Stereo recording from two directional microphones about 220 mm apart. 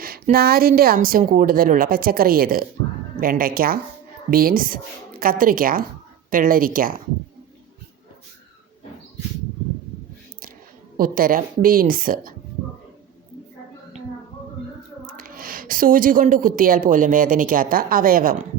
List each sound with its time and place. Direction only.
0.0 s a woman's voice: 40° right (ahead or behind)
10.9 s a woman's voice: 40° right (ahead or behind)
15.0 s a woman's voice: 40° right (ahead or behind)